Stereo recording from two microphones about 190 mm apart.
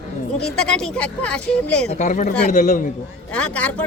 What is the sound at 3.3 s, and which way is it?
Speech, 5° left (ahead or behind).